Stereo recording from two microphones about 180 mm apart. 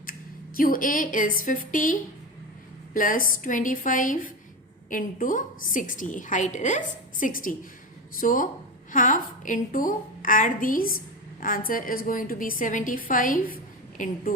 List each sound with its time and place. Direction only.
0.0 s a woman's voice: 50° left (ahead or behind)